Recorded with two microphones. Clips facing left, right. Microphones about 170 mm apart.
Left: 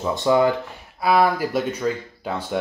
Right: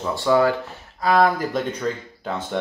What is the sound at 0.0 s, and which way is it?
Speech, 20° left (ahead or behind).